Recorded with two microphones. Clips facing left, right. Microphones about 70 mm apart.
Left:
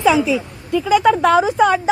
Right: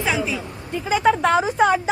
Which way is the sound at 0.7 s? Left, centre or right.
Left.